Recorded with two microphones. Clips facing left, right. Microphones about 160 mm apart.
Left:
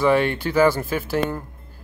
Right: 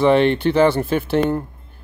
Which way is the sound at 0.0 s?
25° right (ahead or behind).